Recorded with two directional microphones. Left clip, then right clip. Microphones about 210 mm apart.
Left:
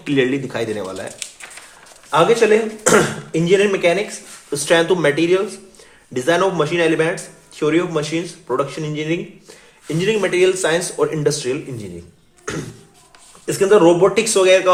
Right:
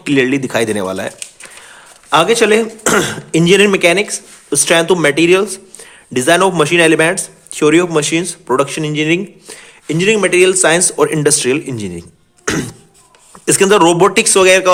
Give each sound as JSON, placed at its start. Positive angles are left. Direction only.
{"t": 0.0, "sound": "a man's voice", "side_deg": -30}